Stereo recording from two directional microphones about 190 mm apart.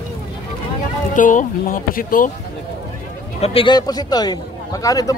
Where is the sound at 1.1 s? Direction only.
45° left (ahead or behind).